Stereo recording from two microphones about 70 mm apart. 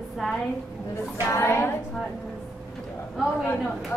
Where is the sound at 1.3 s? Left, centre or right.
Left.